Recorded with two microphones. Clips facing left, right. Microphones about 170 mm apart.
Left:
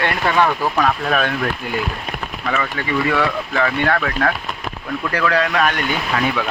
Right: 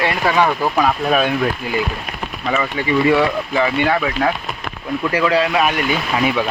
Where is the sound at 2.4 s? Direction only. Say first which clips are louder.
Right 3 dB; 15° right (ahead or behind).